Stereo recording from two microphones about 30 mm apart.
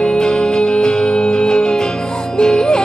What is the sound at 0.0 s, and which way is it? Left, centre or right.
Music, left.